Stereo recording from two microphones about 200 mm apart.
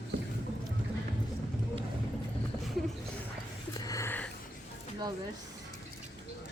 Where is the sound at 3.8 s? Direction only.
15° left (ahead or behind).